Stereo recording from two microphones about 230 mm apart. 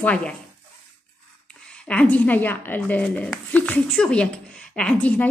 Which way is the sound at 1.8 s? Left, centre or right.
Centre.